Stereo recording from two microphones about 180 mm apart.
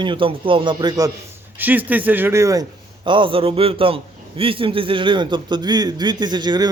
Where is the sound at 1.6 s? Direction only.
10° right (ahead or behind).